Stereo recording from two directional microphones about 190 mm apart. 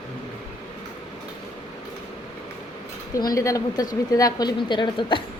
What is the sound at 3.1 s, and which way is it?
A woman's voice, 20° left (ahead or behind).